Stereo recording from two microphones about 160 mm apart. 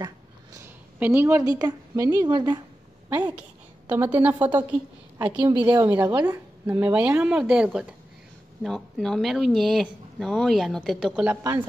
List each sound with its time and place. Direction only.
0.6 s a woman's voice: 15° right (ahead or behind)
3.3 s a woman's voice: 10° right (ahead or behind)
11.2 s a woman's voice: 15° right (ahead or behind)